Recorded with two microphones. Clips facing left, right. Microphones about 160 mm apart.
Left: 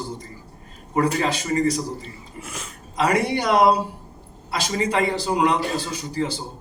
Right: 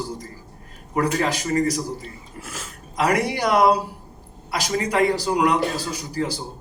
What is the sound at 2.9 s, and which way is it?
A man's voice, 25° left (ahead or behind).